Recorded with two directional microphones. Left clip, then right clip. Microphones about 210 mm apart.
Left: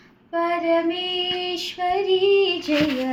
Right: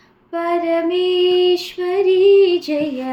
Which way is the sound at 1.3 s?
40° right (ahead or behind).